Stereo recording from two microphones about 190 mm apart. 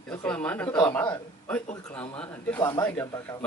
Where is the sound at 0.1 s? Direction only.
10° left (ahead or behind).